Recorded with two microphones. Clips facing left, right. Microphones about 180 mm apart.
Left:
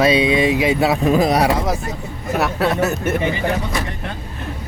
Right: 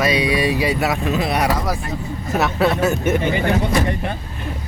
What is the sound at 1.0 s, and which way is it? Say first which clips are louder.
Speech: left 5 dB; 40° left (ahead or behind).